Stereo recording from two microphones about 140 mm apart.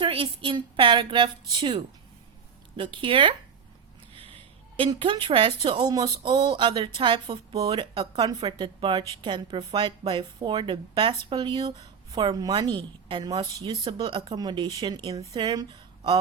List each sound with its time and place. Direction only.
0.0 s speech: 40° right (ahead or behind)
4.8 s speech: 35° right (ahead or behind)